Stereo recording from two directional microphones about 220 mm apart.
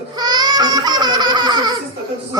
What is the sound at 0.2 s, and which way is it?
Babbling, 20° right (ahead or behind).